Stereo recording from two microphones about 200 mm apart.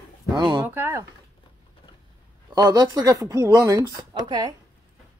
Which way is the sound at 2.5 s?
20° right (ahead or behind).